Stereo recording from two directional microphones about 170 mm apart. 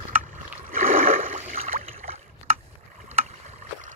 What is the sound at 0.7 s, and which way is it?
Rowboat, 55° right (ahead or behind).